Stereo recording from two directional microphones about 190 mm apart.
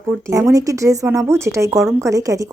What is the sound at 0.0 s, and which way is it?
Speech, 15° right (ahead or behind).